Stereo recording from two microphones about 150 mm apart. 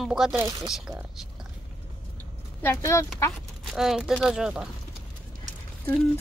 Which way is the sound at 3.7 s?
5° right (ahead or behind).